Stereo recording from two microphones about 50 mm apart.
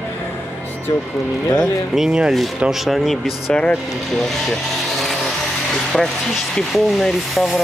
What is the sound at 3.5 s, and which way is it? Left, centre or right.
Speech, left.